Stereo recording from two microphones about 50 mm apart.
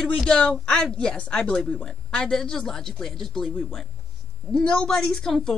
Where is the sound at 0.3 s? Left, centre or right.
Centre.